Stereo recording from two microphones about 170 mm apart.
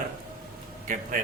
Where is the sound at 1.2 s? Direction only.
50° right (ahead or behind).